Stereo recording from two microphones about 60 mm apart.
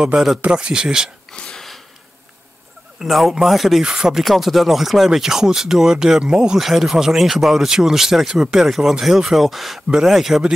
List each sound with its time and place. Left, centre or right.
0.1 s speech: centre
1.3 s a sound: centre
3.0 s speech: centre
3.8 s speech: centre
4.2 s speech: centre